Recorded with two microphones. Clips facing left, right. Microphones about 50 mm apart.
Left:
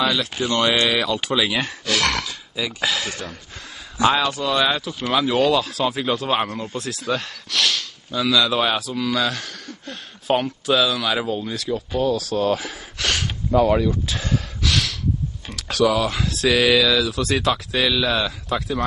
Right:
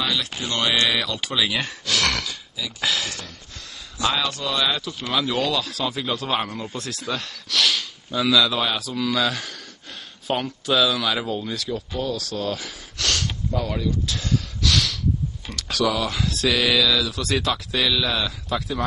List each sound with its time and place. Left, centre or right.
0.0 s speech: centre
3.1 s a sound: centre
4.2 s speech: centre
11.9 s speech: centre
12.9 s gasp: centre
13.5 s speech: left
13.8 s speech: left
14.6 s snort: centre
15.5 s speech: centre